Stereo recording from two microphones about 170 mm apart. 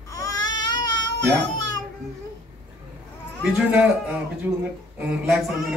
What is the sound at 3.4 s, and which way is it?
A man's voice, 5° right (ahead or behind).